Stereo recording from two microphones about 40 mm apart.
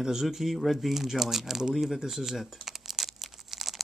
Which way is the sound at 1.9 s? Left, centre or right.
Centre.